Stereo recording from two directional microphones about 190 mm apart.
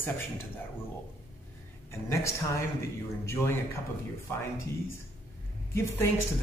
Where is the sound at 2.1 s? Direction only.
15° left (ahead or behind).